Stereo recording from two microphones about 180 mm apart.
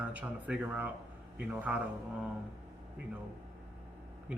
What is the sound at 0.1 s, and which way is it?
Speech, 5° right (ahead or behind).